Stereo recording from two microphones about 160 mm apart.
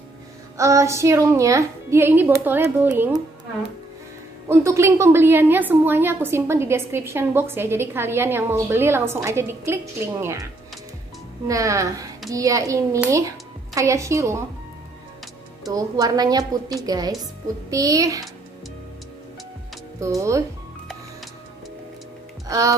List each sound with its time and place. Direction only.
0.6 s a woman's voice: 20° right (ahead or behind)
4.5 s a woman's voice: 15° right (ahead or behind)
11.4 s a woman's voice: 20° right (ahead or behind)
15.7 s a woman's voice: 25° right (ahead or behind)
20.0 s a woman's voice: 20° right (ahead or behind)
22.5 s a woman's voice: 20° right (ahead or behind)